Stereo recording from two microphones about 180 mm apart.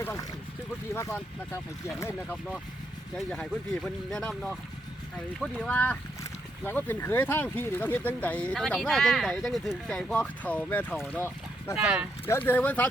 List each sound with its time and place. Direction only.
0.0 s speech: 15° left (ahead or behind)
11.8 s speech: 5° right (ahead or behind)
12.2 s speech: 10° left (ahead or behind)